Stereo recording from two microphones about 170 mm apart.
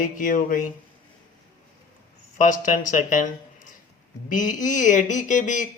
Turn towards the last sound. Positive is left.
turn(degrees=50)  # may be behind; listen again after turning